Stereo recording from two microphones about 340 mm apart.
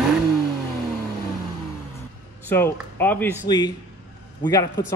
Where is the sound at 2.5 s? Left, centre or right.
Centre.